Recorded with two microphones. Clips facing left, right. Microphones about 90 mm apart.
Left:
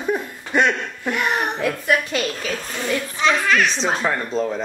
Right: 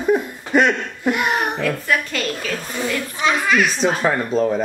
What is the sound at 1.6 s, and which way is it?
Speech, 20° left (ahead or behind).